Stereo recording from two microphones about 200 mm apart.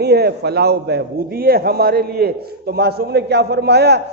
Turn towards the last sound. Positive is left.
turn(degrees=-55)  # may be behind; listen again after turning